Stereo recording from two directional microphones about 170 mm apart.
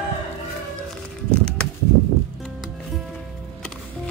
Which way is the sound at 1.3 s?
5° left (ahead or behind).